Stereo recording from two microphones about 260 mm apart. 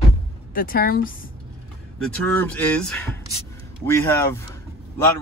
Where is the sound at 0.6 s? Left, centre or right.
Left.